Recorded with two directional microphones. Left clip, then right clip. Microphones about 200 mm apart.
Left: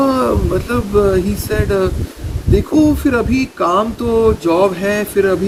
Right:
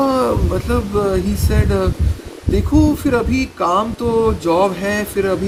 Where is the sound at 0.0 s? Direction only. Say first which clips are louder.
Left 1 dB; 15° right (ahead or behind).